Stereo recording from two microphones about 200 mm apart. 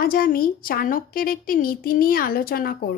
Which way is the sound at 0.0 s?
45° left (ahead or behind).